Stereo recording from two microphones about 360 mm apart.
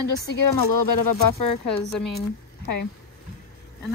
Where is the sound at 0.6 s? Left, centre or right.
Left.